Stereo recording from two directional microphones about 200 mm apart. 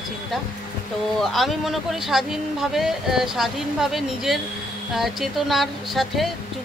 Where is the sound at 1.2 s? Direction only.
Centre (ahead or behind).